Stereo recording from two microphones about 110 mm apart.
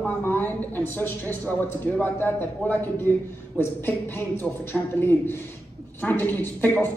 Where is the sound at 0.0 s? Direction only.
20° left (ahead or behind).